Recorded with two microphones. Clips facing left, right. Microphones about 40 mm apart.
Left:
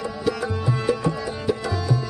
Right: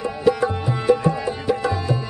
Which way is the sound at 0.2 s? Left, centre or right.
Right.